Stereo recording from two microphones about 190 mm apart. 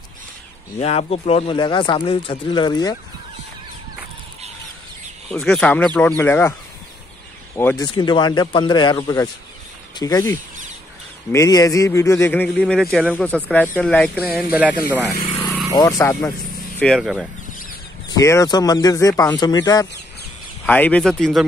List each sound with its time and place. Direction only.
0.7 s speech: 30° left (ahead or behind)
5.3 s a man's voice: 5° left (ahead or behind)
7.5 s a man's voice: 15° left (ahead or behind)
14.3 s speech: 5° right (ahead or behind)
15.7 s a man's voice: 20° left (ahead or behind)
16.8 s speech: centre (ahead or behind)
18.1 s speech: 15° left (ahead or behind)
20.6 s speech: 10° left (ahead or behind)